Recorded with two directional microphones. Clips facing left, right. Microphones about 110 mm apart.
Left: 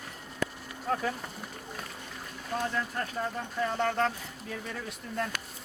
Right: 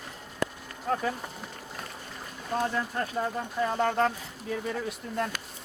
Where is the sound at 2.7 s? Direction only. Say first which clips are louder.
Right 3 dB; 20° right (ahead or behind).